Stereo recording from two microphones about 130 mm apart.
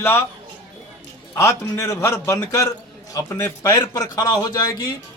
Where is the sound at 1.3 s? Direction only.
25° left (ahead or behind).